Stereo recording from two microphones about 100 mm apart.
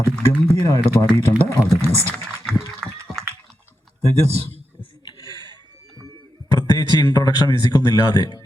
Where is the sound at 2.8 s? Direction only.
5° left (ahead or behind).